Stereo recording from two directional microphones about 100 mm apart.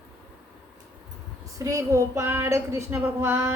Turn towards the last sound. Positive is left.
turn(degrees=-20)  # may be behind; listen again after turning